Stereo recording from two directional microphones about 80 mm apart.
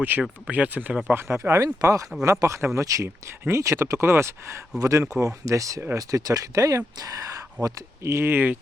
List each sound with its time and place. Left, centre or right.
0.2 s speech: centre
1.1 s speech: right
8.0 s speech: right